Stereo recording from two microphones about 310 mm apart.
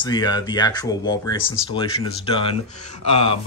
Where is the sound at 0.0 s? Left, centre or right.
Centre.